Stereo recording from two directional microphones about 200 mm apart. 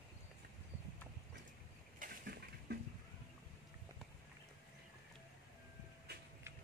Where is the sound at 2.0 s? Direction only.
55° right (ahead or behind).